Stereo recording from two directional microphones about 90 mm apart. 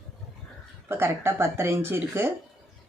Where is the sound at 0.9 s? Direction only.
25° right (ahead or behind).